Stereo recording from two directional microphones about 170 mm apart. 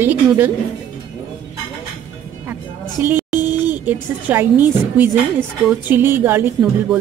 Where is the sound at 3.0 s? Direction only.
10° right (ahead or behind).